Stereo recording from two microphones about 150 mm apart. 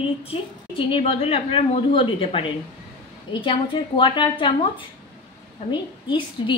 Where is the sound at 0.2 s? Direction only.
40° left (ahead or behind).